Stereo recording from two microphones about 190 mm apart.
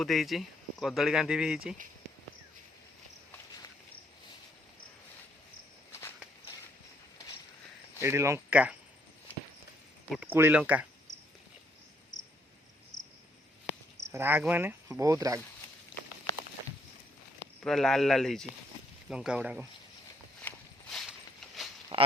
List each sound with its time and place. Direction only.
0.0 s speech: centre (ahead or behind)
8.0 s speech: 15° right (ahead or behind)
10.1 s speech: 10° right (ahead or behind)
14.1 s speech: 10° right (ahead or behind)
17.6 s speech: centre (ahead or behind)
20.9 s a sound: centre (ahead or behind)
21.9 s a sound: 25° right (ahead or behind)